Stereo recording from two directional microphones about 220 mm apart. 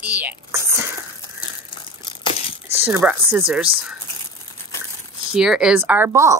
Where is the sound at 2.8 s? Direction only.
10° right (ahead or behind).